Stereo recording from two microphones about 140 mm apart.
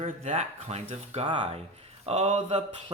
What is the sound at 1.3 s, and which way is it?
Speech, 35° right (ahead or behind).